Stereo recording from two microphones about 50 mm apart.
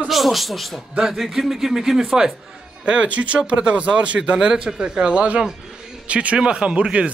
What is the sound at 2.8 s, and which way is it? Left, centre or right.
Speech, right.